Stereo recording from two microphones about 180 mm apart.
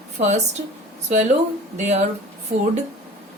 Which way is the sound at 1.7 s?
40° right (ahead or behind).